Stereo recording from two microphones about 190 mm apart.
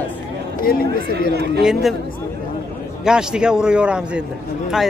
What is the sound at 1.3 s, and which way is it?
Speech, 60° right (ahead or behind).